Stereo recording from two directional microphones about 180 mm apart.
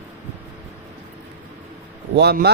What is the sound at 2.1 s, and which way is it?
Speech, 65° right (ahead or behind).